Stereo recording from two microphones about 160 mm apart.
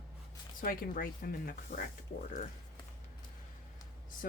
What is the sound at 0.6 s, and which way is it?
Speech, 60° left (ahead or behind).